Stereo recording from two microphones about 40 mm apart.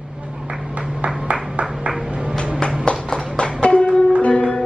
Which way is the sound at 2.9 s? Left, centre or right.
Left.